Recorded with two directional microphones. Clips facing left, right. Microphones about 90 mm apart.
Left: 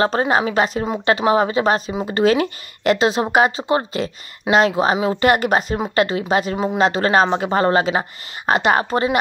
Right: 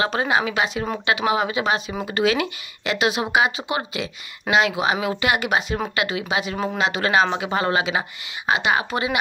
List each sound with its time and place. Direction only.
0.0 s speech: 40° left (ahead or behind)
1.9 s speech: 25° left (ahead or behind)
2.2 s a woman's voice: 40° left (ahead or behind)